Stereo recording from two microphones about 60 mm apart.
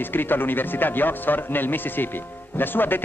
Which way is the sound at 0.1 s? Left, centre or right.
Left.